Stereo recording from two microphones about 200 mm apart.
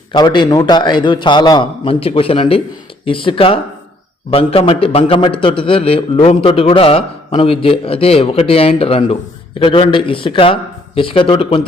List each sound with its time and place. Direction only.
0.1 s a man's voice: 25° left (ahead or behind)